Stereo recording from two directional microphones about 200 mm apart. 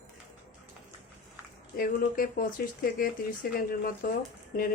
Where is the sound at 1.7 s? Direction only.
50° left (ahead or behind).